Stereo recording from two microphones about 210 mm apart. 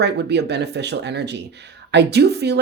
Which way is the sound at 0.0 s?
55° right (ahead or behind).